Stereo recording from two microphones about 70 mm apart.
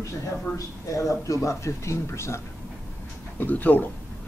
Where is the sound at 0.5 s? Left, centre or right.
Left.